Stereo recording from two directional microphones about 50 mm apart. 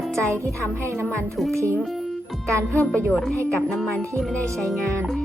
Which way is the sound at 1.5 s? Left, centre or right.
Right.